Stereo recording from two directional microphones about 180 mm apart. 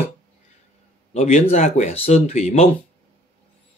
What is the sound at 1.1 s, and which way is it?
Speech, 35° left (ahead or behind).